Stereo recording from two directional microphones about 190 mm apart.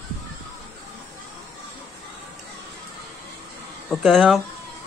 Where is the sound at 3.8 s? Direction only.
5° left (ahead or behind).